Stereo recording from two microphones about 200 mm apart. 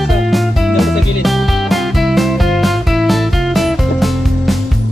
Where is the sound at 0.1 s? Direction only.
Centre (ahead or behind).